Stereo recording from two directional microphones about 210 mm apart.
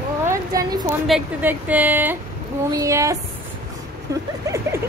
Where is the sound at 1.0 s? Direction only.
5° right (ahead or behind).